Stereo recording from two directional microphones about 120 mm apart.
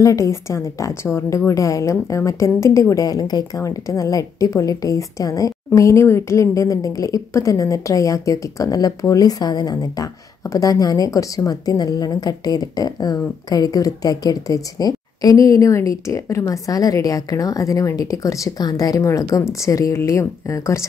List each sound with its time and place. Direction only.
0.0 s a woman's voice: 25° left (ahead or behind)